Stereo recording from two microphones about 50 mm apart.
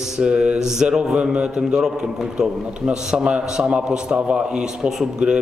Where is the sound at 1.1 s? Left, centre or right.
Right.